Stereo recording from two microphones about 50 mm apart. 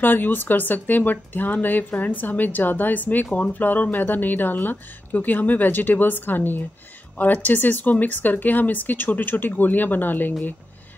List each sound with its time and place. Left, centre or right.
0.0 s speech: left